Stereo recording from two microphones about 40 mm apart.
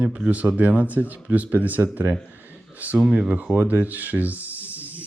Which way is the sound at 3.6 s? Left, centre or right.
Right.